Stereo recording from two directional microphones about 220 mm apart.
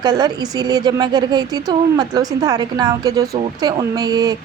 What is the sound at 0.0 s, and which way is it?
A woman's voice, 20° right (ahead or behind).